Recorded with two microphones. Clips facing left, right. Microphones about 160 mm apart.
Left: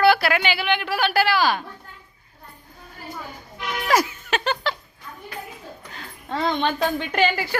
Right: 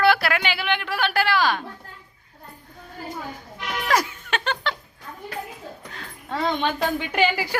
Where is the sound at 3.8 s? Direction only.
5° left (ahead or behind).